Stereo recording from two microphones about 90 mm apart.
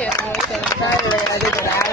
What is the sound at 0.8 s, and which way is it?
Speech, 35° left (ahead or behind).